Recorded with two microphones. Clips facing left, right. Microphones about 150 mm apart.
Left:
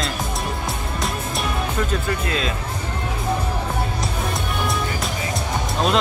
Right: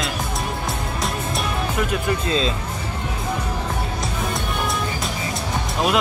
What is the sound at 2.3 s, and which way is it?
Speech, 25° right (ahead or behind).